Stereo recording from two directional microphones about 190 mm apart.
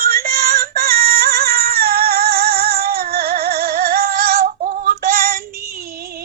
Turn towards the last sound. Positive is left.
turn(degrees=-50)  # may be behind; listen again after turning